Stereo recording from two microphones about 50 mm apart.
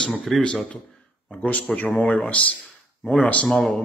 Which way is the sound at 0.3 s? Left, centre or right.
Centre.